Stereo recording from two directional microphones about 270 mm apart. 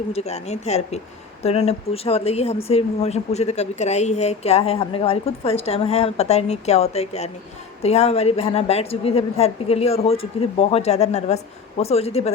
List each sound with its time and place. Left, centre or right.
0.1 s a woman's voice: left